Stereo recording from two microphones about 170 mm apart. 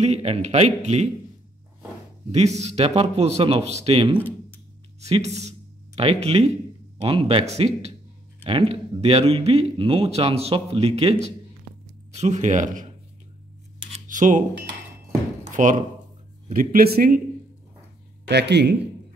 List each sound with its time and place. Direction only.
0.0 s speech: 40° right (ahead or behind)
2.3 s speech: 40° right (ahead or behind)
14.0 s speech: 50° right (ahead or behind)
15.5 s speech: 50° right (ahead or behind)
18.3 s a man's voice: 85° right